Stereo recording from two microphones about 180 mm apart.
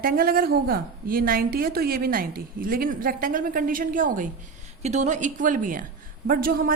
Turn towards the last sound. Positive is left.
turn(degrees=-55)  # may be behind; listen again after turning